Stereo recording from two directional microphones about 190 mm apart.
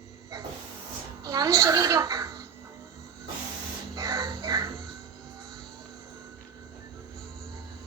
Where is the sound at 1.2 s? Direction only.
20° right (ahead or behind).